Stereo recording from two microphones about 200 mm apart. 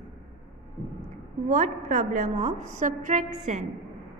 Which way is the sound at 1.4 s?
35° right (ahead or behind).